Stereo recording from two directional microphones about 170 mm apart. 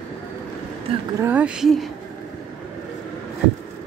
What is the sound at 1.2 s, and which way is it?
Speech, 10° right (ahead or behind).